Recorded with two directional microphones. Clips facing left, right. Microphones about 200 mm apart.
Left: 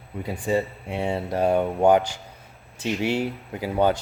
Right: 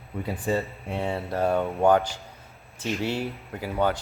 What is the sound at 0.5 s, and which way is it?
Speech, 15° left (ahead or behind).